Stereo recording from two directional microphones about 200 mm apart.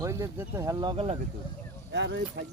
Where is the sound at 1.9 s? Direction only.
60° right (ahead or behind).